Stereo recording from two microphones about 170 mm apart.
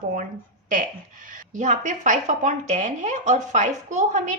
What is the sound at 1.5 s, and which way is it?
A woman's voice, 45° right (ahead or behind).